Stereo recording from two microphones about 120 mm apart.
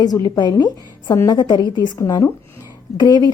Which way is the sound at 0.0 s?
35° left (ahead or behind).